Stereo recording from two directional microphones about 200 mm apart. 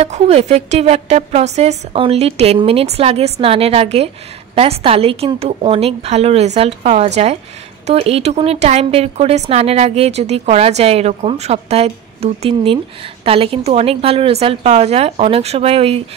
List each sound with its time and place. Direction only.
0.0 s a woman's voice: 35° right (ahead or behind)